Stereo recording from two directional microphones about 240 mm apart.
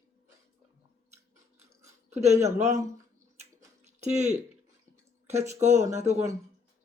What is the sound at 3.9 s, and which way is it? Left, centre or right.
Speech, right.